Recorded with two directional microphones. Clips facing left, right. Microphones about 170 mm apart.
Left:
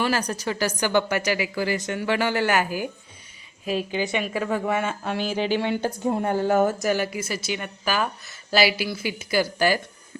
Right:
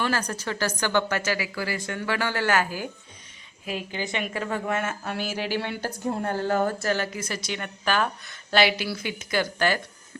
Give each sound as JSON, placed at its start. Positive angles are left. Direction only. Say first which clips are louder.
{"t": 0.0, "sound": "a woman's voice", "louder": "left 3 dB", "side_deg": 15}
{"t": 4.4, "sound": "a woman's voice", "louder": "left 3 dB", "side_deg": 10}
{"t": 5.1, "sound": "speech", "louder": "left 7 dB", "side_deg": -5}
{"t": 5.8, "sound": "a woman's voice", "louder": "left 4 dB", "side_deg": 15}